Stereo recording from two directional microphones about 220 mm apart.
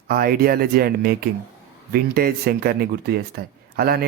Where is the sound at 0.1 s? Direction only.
40° right (ahead or behind).